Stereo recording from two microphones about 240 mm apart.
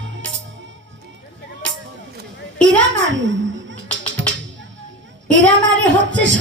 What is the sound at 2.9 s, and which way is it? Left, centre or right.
Music, right.